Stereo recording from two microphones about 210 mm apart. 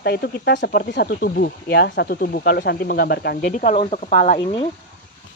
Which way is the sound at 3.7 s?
30° left (ahead or behind).